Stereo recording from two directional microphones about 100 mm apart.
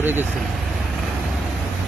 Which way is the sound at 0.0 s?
20° right (ahead or behind).